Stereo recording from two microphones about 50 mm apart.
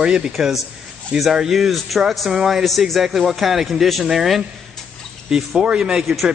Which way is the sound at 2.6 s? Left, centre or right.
Centre.